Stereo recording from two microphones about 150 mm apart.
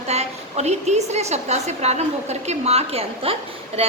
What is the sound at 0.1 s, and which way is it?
A woman's voice, 45° right (ahead or behind).